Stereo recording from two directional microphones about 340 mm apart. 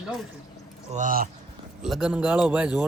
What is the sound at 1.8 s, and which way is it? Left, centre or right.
Speech, centre.